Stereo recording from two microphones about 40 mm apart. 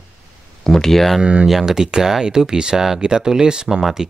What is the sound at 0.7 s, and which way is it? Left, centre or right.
Speech, centre.